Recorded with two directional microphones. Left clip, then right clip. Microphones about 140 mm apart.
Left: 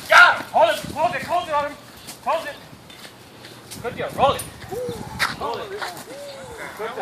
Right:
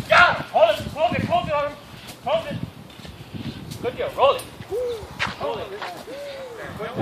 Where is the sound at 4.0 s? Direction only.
10° right (ahead or behind).